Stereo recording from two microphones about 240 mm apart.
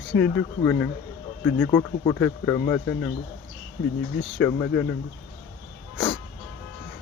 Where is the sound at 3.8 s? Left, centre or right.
Left.